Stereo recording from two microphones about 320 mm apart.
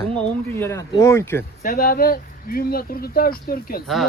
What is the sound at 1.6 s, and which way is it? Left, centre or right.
Speech, left.